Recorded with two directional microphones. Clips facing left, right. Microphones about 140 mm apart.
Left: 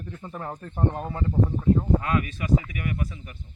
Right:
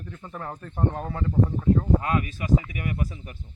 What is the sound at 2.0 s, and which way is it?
Speech, 30° right (ahead or behind).